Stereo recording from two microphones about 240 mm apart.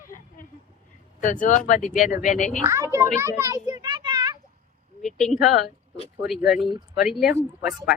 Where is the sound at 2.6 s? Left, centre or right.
Centre.